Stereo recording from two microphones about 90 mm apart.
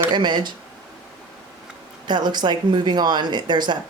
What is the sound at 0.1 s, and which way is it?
Speech, 60° right (ahead or behind).